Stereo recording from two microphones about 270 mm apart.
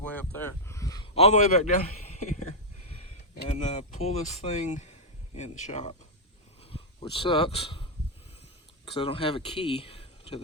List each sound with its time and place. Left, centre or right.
0.4 s speech: centre
3.5 s speech: left
6.6 s a sound: left
8.8 s speech: centre